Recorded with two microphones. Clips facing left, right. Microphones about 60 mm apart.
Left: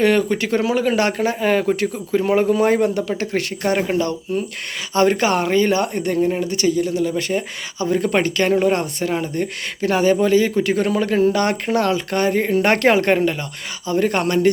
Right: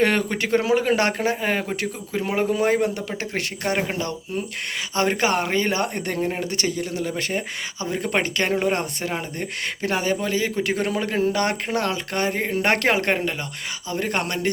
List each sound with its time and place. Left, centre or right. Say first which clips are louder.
0.0 s speech: left 4 dB; right
1.4 s speech: left 7 dB; centre
6.0 s speech: left 6 dB; right
7.8 s speech: left 6 dB; centre
8.8 s speech: left 5 dB; right
9.9 s speech: left 9 dB; centre
10.6 s speech: left 5 dB; centre